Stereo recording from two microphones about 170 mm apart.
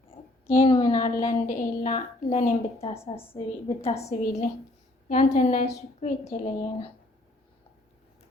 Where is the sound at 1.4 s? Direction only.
55° left (ahead or behind).